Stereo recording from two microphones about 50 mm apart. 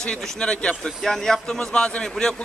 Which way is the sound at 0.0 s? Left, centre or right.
Centre.